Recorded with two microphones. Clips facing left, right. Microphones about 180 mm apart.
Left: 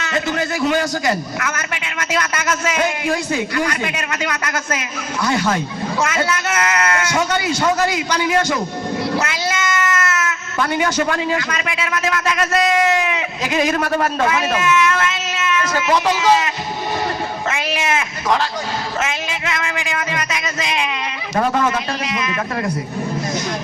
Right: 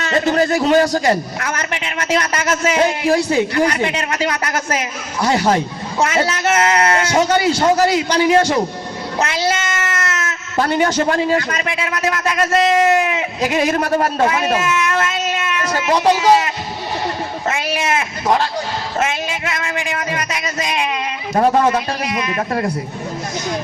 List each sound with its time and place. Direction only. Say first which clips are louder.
0.0 s a man's voice: right 5 dB; 40° right (ahead or behind)
13.1 s a man's voice: right 2 dB; 45° right (ahead or behind)
19.7 s a man's voice: right 1 dB; 40° right (ahead or behind)